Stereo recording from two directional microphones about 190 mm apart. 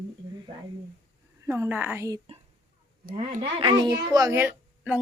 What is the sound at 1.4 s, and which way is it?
Speech, 10° right (ahead or behind).